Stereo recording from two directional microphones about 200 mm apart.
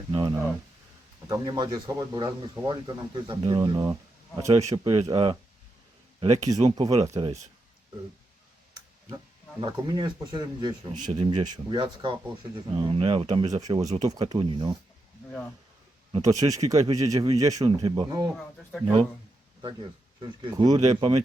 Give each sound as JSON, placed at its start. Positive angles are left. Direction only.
{"t": 0.1, "sound": "a sound", "side_deg": -20}
{"t": 1.3, "sound": "speech", "side_deg": -20}
{"t": 6.1, "sound": "speech", "side_deg": -35}
{"t": 7.0, "sound": "speech", "side_deg": -15}
{"t": 9.0, "sound": "speech", "side_deg": -25}
{"t": 11.0, "sound": "speech", "side_deg": -30}
{"t": 16.2, "sound": "speech", "side_deg": -15}
{"t": 18.7, "sound": "speech", "side_deg": 0}
{"t": 20.2, "sound": "speech", "side_deg": -20}